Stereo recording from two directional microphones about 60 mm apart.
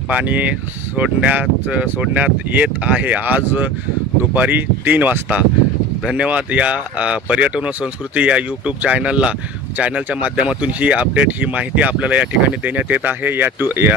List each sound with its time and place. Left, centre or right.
0.1 s speech: right